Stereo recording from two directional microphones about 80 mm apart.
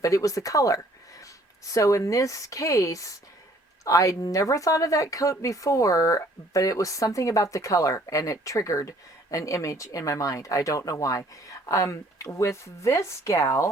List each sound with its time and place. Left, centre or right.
0.0 s speech: left